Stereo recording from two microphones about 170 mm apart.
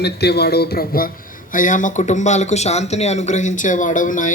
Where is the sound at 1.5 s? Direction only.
50° left (ahead or behind).